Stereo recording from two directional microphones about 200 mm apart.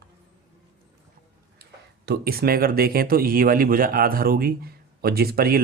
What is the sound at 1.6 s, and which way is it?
Speech, 50° right (ahead or behind).